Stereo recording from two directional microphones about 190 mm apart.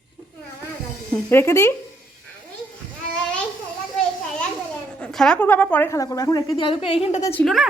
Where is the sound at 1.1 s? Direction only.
10° left (ahead or behind).